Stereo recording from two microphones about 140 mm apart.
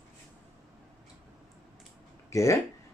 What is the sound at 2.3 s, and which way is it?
Speech, 20° left (ahead or behind).